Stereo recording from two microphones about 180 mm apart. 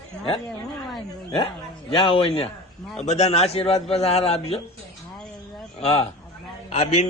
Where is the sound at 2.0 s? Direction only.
30° left (ahead or behind).